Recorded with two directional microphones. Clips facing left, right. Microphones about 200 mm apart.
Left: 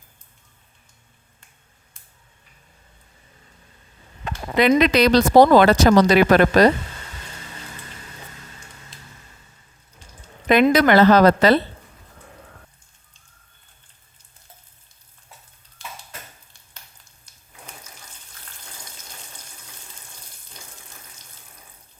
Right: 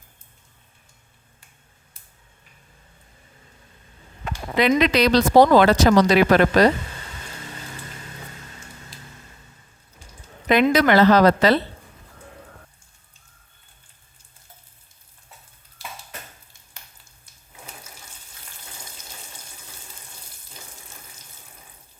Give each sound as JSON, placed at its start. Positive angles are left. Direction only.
{"t": 4.8, "sound": "speech", "side_deg": 50}
{"t": 10.5, "sound": "speech", "side_deg": 50}